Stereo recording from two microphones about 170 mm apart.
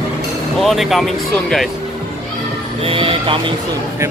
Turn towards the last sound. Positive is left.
turn(degrees=-30)  # may be behind; listen again after turning